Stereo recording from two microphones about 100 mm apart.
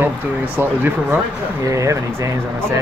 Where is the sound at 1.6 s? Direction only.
30° right (ahead or behind).